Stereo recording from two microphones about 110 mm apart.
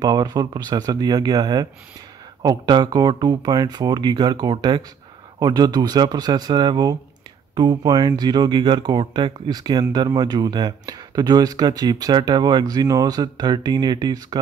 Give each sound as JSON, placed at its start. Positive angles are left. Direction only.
{"t": 0.0, "sound": "speech", "side_deg": -35}